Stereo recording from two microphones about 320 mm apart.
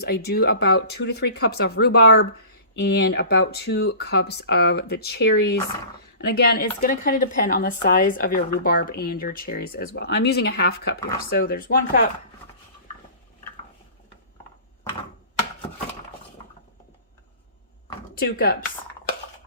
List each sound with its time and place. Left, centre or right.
0.0 s speech: left
18.2 s speech: left